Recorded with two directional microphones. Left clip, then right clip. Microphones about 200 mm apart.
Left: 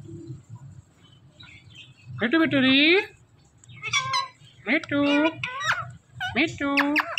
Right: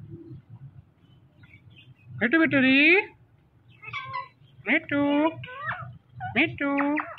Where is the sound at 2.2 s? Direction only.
15° left (ahead or behind).